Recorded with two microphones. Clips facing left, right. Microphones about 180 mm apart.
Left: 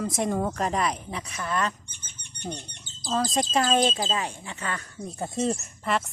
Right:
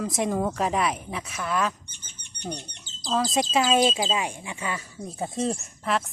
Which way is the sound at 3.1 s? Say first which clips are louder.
Right 1 dB; centre (ahead or behind).